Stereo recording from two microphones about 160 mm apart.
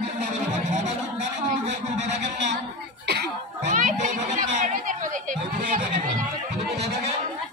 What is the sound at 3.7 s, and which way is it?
Chatter, 50° right (ahead or behind).